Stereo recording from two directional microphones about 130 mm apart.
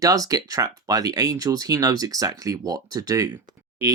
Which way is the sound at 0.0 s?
25° right (ahead or behind).